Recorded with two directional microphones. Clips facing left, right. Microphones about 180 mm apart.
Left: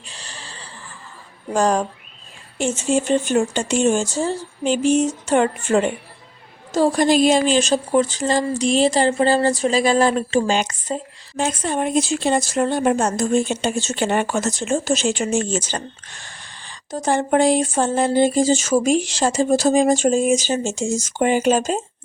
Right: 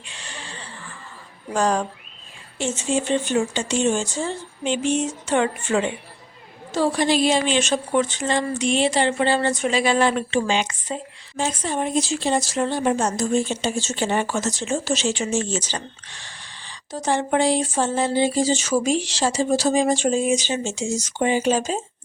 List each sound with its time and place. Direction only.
0.0 s a sound: 35° left (ahead or behind)
1.5 s a woman's voice: 45° left (ahead or behind)
11.3 s a woman's voice: 55° left (ahead or behind)